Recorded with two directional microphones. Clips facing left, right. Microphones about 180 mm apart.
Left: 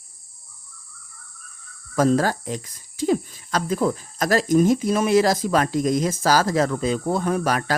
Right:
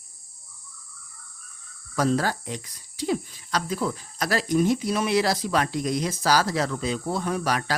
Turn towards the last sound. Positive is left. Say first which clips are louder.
# left 4 dB
turn(degrees=50)  # may be behind; listen again after turning